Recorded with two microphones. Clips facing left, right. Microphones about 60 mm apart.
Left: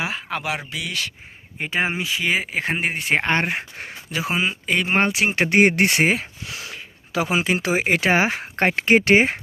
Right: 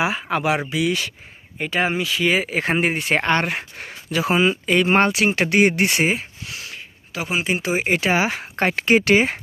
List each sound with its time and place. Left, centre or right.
0.0 s speech: centre
1.5 s speech: left
2.2 s speech: centre
3.2 s speech: left
4.2 s speech: centre
5.2 s speech: left
5.5 s speech: left
7.4 s speech: left
7.9 s speech: left